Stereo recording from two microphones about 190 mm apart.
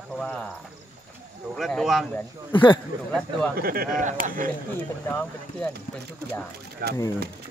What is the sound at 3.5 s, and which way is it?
Speech, 50° right (ahead or behind).